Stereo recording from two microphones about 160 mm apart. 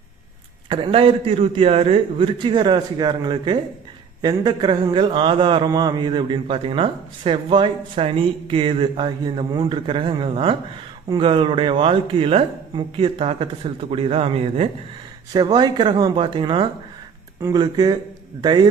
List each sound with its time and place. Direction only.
0.7 s speech: 35° right (ahead or behind)
15.3 s speech: 25° right (ahead or behind)